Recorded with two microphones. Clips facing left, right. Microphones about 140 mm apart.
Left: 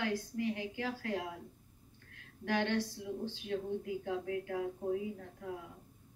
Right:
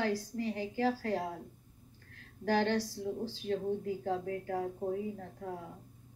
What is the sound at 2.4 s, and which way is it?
A woman's voice, 40° right (ahead or behind).